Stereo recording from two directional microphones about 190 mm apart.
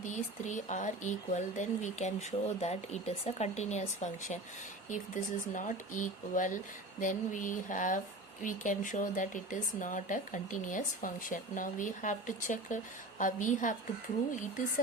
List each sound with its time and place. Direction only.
0.0 s speech: 40° left (ahead or behind)